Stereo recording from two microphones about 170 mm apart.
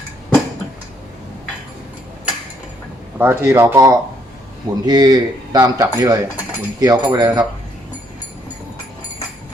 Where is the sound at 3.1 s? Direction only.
15° right (ahead or behind).